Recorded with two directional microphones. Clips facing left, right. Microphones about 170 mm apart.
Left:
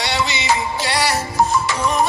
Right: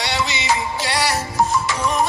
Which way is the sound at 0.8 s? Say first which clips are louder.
Left 1 dB; 60° left (ahead or behind).